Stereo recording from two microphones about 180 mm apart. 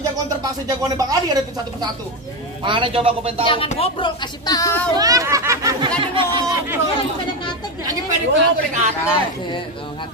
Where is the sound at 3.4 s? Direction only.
30° left (ahead or behind).